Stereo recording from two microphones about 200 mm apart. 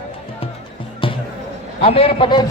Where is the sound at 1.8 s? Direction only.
30° left (ahead or behind).